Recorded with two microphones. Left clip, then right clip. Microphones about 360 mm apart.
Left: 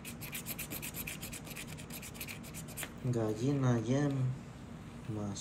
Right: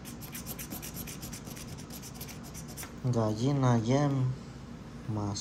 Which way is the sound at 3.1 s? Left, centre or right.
Centre.